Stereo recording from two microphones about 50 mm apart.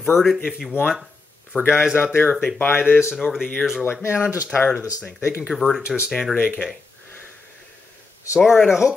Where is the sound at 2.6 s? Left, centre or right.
Left.